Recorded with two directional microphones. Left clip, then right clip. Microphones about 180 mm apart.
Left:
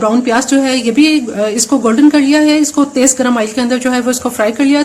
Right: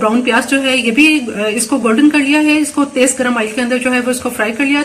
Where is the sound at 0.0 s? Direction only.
45° left (ahead or behind).